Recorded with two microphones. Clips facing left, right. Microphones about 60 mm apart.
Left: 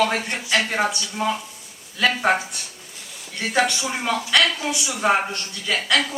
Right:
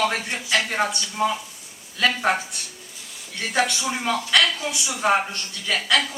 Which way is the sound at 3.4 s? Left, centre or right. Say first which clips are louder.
Left 2 dB; centre.